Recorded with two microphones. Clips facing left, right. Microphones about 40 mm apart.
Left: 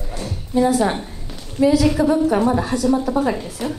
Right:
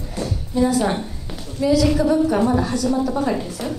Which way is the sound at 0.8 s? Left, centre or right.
Centre.